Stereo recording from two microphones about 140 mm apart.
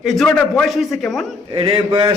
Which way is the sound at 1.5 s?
40° right (ahead or behind).